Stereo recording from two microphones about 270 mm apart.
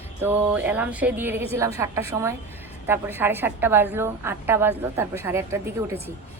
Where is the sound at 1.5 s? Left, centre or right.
Centre.